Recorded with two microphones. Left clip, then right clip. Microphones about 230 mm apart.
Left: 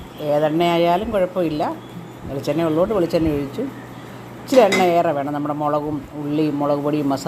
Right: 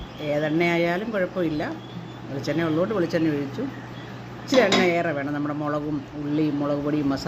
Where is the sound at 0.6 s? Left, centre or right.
Centre.